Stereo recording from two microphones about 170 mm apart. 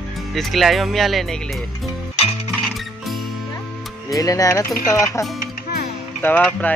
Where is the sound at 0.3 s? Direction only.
Centre (ahead or behind).